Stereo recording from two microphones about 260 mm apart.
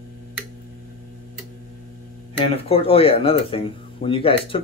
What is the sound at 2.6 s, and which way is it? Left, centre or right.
Speech, left.